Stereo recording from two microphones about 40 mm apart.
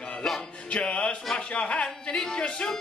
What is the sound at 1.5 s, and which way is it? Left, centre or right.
Speech, left.